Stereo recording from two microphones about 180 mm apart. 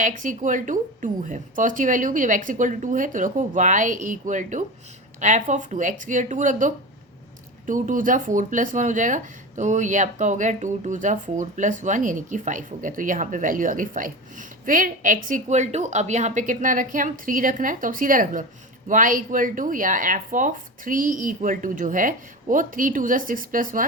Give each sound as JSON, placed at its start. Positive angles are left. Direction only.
{"t": 0.0, "sound": "speech", "side_deg": -45}